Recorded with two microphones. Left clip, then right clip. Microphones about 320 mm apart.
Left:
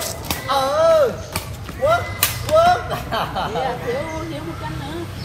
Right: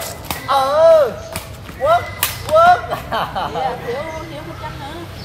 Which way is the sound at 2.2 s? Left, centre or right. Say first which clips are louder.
Right 3 dB; centre.